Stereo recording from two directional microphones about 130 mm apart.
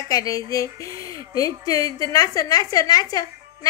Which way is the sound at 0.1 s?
30° left (ahead or behind).